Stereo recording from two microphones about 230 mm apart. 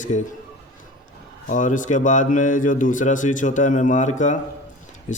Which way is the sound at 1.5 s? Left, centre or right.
Left.